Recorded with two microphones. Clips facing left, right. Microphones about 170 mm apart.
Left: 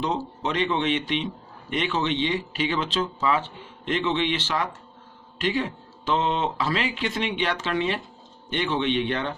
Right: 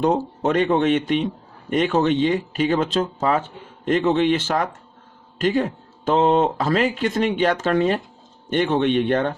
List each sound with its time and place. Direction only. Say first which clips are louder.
0.0 s speech: right 7 dB; 50° right (ahead or behind)